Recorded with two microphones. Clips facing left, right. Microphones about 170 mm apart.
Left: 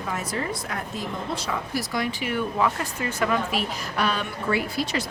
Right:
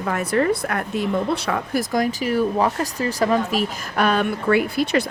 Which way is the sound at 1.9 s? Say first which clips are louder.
Right 7 dB; 40° right (ahead or behind).